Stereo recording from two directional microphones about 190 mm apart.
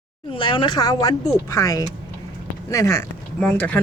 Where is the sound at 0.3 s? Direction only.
25° left (ahead or behind).